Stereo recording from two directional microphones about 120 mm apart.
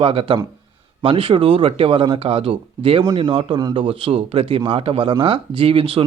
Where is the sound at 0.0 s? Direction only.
50° right (ahead or behind).